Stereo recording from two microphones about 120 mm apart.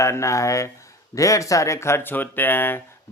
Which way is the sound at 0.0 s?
25° left (ahead or behind).